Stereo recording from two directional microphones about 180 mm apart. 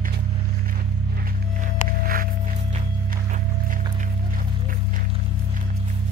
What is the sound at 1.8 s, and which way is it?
Music, 50° right (ahead or behind).